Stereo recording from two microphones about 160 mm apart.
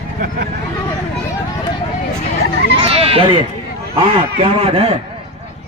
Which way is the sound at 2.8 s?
35° right (ahead or behind).